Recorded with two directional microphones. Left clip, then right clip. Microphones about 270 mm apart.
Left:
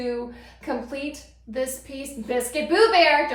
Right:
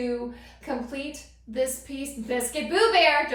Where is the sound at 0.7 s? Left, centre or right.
Left.